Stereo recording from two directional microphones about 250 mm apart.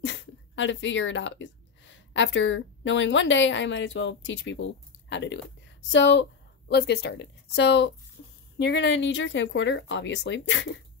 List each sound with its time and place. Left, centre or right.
0.0 s speech: left
8.2 s a sound: left
8.5 s speech: left